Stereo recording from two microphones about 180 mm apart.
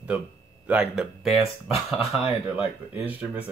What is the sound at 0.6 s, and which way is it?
Speech, 5° right (ahead or behind).